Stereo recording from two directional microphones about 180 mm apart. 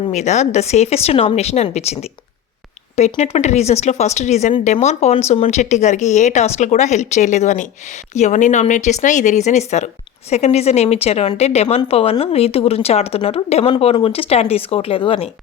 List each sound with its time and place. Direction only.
0.1 s speech: 40° left (ahead or behind)